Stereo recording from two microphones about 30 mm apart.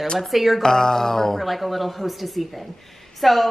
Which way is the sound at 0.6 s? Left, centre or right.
Centre.